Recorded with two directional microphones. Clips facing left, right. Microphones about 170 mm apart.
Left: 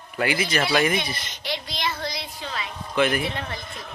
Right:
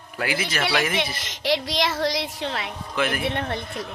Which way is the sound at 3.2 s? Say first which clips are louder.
Right 4 dB; 60° right (ahead or behind).